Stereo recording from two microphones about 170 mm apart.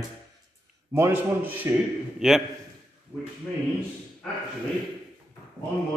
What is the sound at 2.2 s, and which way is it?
Speech, centre (ahead or behind).